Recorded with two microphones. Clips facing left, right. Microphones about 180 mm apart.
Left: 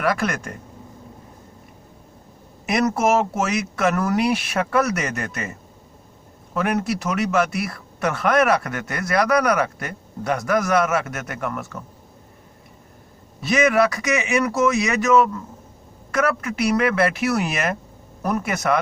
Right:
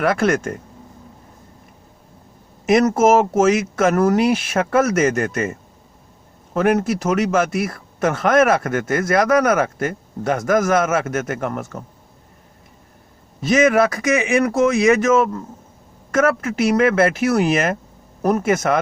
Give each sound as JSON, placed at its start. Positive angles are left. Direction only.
{"t": 0.0, "sound": "speech", "side_deg": -40}
{"t": 2.6, "sound": "speech", "side_deg": -40}
{"t": 13.5, "sound": "speech", "side_deg": -45}